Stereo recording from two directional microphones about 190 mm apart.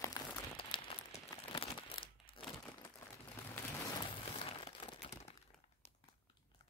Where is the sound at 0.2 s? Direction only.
20° left (ahead or behind).